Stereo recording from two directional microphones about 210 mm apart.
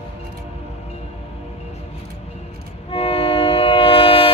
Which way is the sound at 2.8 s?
25° left (ahead or behind).